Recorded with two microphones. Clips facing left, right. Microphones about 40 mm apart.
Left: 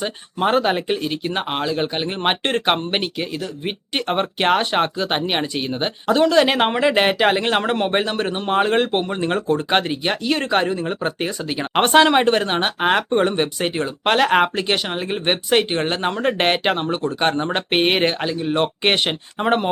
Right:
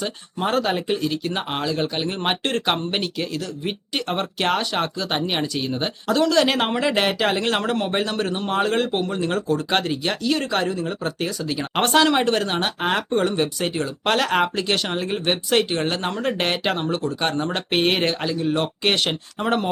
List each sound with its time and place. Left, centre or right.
0.0 s speech: left